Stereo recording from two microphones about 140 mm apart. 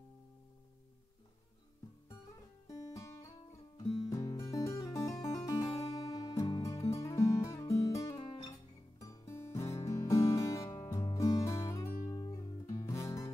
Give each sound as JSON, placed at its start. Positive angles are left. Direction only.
{"t": 2.7, "sound": "guitar", "side_deg": 25}
{"t": 5.3, "sound": "music", "side_deg": 20}
{"t": 12.1, "sound": "guitar", "side_deg": 30}
{"t": 12.8, "sound": "music", "side_deg": 25}